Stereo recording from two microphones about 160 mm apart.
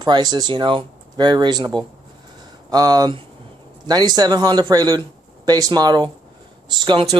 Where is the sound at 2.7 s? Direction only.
25° right (ahead or behind).